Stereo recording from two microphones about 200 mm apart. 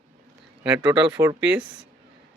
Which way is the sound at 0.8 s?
15° right (ahead or behind).